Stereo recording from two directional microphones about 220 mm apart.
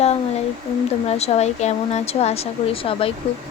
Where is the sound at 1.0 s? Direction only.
30° left (ahead or behind).